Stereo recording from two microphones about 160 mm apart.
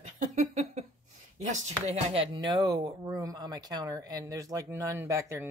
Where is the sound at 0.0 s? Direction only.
50° right (ahead or behind).